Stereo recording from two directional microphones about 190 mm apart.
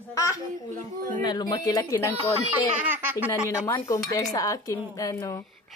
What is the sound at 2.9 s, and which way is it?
Speech, 10° right (ahead or behind).